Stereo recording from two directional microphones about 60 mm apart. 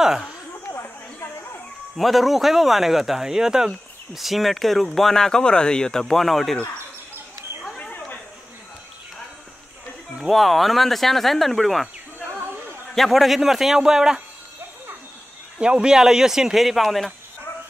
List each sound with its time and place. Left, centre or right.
0.7 s chatter: left
2.0 s speech: centre
7.7 s chatter: left
10.3 s speech: centre
12.9 s speech: centre
15.6 s a man's voice: centre